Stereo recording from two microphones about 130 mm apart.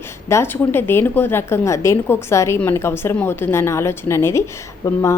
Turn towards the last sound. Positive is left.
turn(degrees=20)  # may be behind; listen again after turning